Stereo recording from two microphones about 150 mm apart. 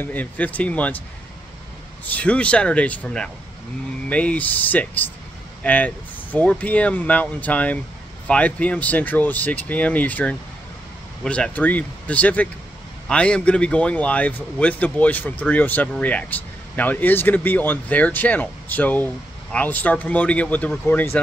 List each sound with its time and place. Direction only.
0.0 s speech: 10° left (ahead or behind)
2.0 s speech: 10° left (ahead or behind)